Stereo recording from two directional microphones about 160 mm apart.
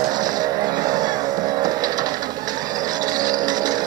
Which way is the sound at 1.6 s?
25° right (ahead or behind).